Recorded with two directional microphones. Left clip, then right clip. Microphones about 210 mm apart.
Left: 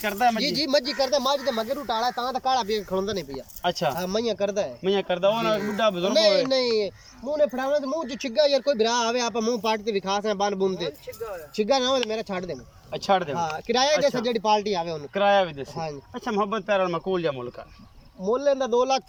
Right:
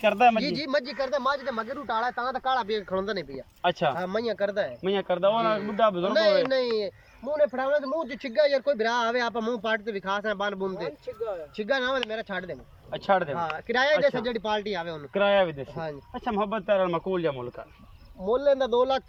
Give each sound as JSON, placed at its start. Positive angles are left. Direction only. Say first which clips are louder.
{"t": 0.0, "sound": "speech", "louder": "right 3 dB", "side_deg": -10}
{"t": 0.4, "sound": "speech", "louder": "left 4 dB", "side_deg": 10}
{"t": 4.8, "sound": "speech", "louder": "left 2 dB", "side_deg": 0}
{"t": 5.4, "sound": "speech", "louder": "left 1 dB", "side_deg": 10}
{"t": 5.7, "sound": "speech", "louder": "even", "side_deg": 0}
{"t": 6.1, "sound": "speech", "louder": "left 2 dB", "side_deg": 10}
{"t": 12.9, "sound": "speech", "louder": "left 1 dB", "side_deg": 0}
{"t": 15.1, "sound": "speech", "louder": "left 2 dB", "side_deg": -10}
{"t": 15.8, "sound": "speech", "louder": "left 2 dB", "side_deg": 5}
{"t": 18.2, "sound": "speech", "louder": "even", "side_deg": 10}